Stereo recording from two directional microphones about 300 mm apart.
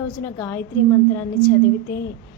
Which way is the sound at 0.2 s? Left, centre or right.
Centre.